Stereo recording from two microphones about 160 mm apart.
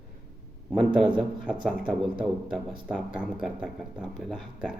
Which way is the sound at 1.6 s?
Centre (ahead or behind).